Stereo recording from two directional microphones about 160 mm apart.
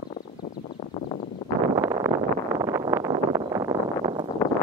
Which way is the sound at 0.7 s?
45° left (ahead or behind).